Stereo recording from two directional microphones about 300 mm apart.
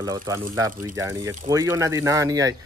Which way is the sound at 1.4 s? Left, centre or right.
Centre.